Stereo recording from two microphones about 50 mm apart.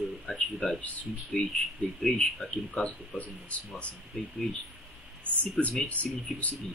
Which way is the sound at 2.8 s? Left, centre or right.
Left.